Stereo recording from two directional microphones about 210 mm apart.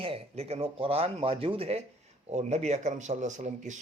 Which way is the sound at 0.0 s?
30° right (ahead or behind).